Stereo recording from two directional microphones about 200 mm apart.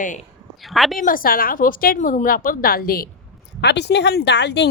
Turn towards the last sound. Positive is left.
turn(degrees=60)  # may be behind; listen again after turning